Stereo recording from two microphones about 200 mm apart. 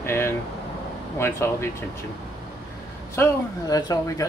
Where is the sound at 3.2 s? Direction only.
20° left (ahead or behind).